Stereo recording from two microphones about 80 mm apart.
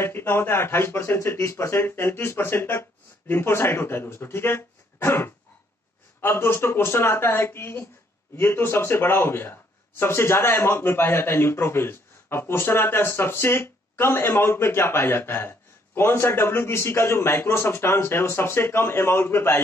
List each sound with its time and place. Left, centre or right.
0.0 s a man's voice: left